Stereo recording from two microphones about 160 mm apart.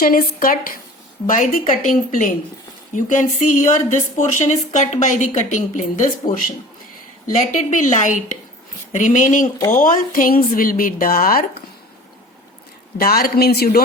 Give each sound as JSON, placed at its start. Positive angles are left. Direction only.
{"t": 0.0, "sound": "speech", "side_deg": 65}
{"t": 7.3, "sound": "speech", "side_deg": 50}
{"t": 13.0, "sound": "speech", "side_deg": 65}